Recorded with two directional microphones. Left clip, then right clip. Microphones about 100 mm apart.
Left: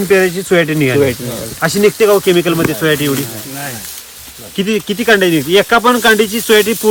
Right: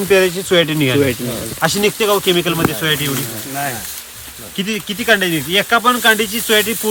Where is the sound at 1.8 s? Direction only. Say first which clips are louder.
Left 8 dB; 55° right (ahead or behind).